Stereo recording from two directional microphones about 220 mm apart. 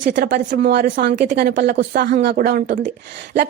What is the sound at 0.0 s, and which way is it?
A woman's voice, 35° right (ahead or behind).